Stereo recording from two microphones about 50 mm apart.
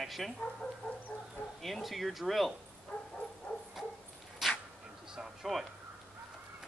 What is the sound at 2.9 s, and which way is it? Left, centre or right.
Bow-wow, left.